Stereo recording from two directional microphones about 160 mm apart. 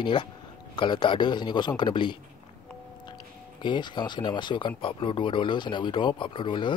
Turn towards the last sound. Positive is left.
turn(degrees=30)  # may be behind; listen again after turning